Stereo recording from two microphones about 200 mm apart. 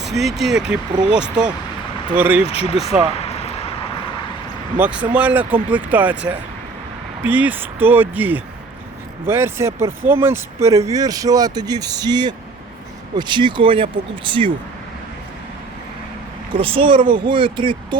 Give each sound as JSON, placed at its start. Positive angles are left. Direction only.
{"t": 0.0, "sound": "speech", "side_deg": 0}
{"t": 2.5, "sound": "speech", "side_deg": 30}
{"t": 3.1, "sound": "a sound", "side_deg": 30}
{"t": 4.8, "sound": "speech", "side_deg": -5}
{"t": 16.5, "sound": "speech", "side_deg": -25}